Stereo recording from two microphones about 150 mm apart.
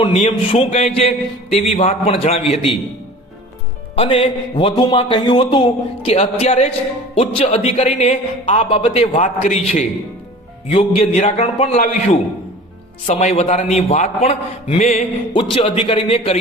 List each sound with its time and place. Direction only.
0.0 s a man's voice: 40° left (ahead or behind)
2.0 s a man's voice: 40° left (ahead or behind)
3.9 s a man's voice: 40° left (ahead or behind)
9.1 s a man's voice: 55° left (ahead or behind)
10.7 s a man's voice: 40° left (ahead or behind)